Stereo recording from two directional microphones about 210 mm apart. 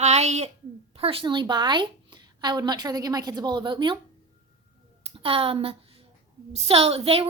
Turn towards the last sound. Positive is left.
turn(degrees=-30)  # may be behind; listen again after turning